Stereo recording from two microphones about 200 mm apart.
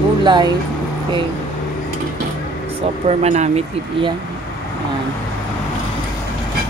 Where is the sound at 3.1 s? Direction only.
35° right (ahead or behind).